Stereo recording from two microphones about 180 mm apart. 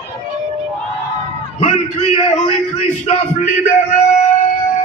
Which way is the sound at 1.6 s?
35° left (ahead or behind).